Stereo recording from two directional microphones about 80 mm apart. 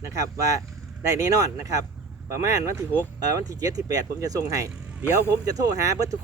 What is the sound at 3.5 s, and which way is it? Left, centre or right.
Speech, right.